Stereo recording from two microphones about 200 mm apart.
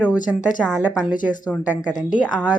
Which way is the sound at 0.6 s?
Centre (ahead or behind).